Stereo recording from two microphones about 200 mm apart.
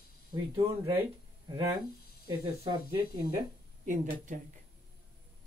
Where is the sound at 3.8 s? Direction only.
40° right (ahead or behind).